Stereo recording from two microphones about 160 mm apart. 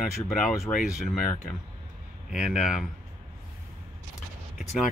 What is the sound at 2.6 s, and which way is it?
Speech, 5° right (ahead or behind).